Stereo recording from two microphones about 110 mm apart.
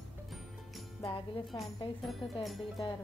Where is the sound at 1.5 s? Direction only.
40° left (ahead or behind).